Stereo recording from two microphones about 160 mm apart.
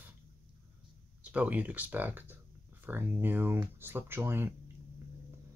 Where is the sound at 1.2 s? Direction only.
10° right (ahead or behind).